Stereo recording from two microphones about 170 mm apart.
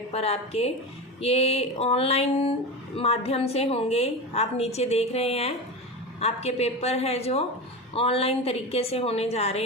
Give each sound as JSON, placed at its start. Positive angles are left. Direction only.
{"t": 0.1, "sound": "a woman's voice", "side_deg": 35}